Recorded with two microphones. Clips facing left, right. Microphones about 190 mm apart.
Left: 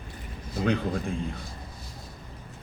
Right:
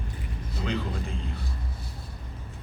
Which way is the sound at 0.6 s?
55° left (ahead or behind).